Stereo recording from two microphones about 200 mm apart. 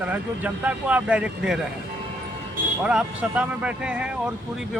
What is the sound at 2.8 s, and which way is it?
Speech, 5° right (ahead or behind).